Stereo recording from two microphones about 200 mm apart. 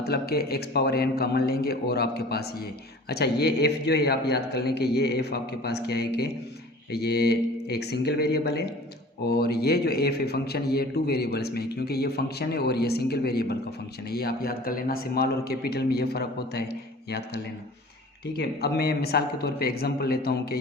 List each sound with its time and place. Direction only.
0.0 s a man's voice: 50° left (ahead or behind)